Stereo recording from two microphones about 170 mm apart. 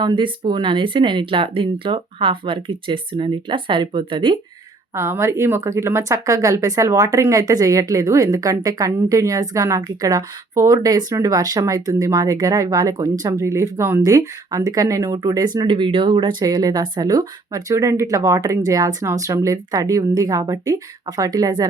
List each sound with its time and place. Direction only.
0.0 s speech: 25° right (ahead or behind)
4.9 s speech: 15° right (ahead or behind)